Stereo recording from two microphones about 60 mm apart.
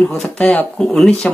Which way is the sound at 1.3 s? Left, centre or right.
Centre.